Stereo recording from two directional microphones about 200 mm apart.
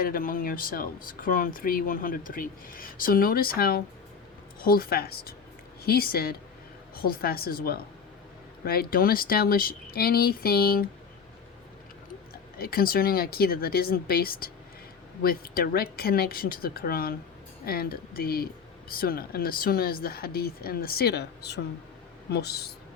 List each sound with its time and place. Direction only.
0.0 s speech: 45° left (ahead or behind)
12.3 s speech: 50° left (ahead or behind)